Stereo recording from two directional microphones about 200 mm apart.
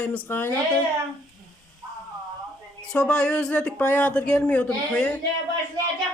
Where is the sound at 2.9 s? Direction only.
5° left (ahead or behind).